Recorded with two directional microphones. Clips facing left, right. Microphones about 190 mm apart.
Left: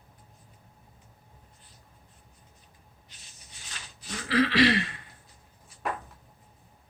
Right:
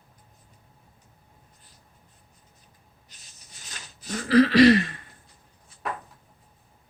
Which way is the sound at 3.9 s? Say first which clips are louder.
Right 7 dB; 45° right (ahead or behind).